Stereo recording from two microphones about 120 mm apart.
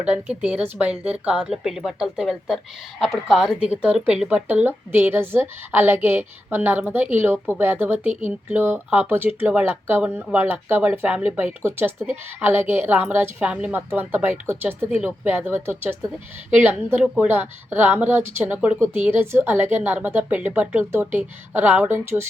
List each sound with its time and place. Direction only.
0.0 s speech: 10° right (ahead or behind)